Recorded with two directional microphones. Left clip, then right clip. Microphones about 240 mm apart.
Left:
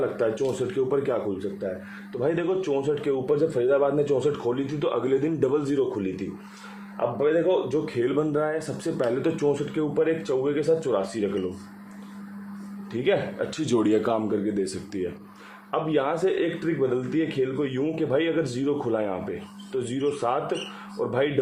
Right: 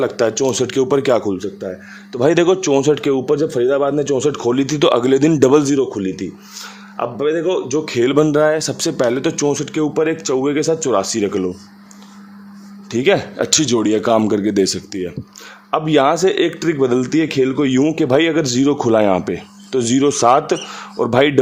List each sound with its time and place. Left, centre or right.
0.8 s speech: right
12.9 s speech: right
13.7 s speech: right
14.2 s speech: right
15.7 s speech: right